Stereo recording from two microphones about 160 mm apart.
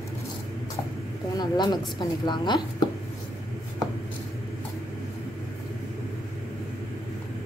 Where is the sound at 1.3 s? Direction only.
25° left (ahead or behind).